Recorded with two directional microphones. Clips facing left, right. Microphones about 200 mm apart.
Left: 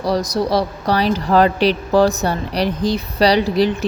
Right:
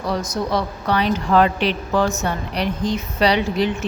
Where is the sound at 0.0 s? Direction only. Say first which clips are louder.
Left 5 dB; 35° left (ahead or behind).